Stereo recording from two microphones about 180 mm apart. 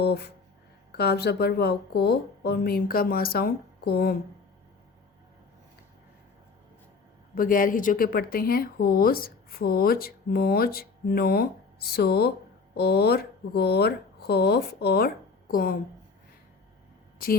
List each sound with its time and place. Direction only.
0.0 s speech: 65° left (ahead or behind)
7.3 s speech: 50° left (ahead or behind)